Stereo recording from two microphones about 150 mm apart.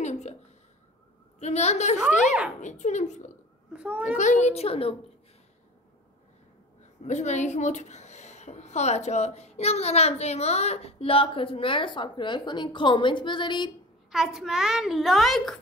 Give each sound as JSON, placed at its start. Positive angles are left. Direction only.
{"t": 0.0, "sound": "a sound", "side_deg": 50}
{"t": 1.4, "sound": "a woman's voice", "side_deg": 50}
{"t": 3.7, "sound": "a child's voice", "side_deg": -10}
{"t": 4.2, "sound": "a woman's voice", "side_deg": 50}
{"t": 7.1, "sound": "a woman's voice", "side_deg": 50}
{"t": 14.1, "sound": "a child's voice", "side_deg": -5}